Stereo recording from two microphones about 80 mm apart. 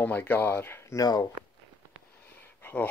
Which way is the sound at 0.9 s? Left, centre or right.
Left.